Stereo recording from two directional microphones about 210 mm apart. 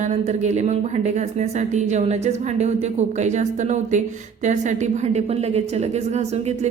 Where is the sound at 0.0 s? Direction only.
35° right (ahead or behind).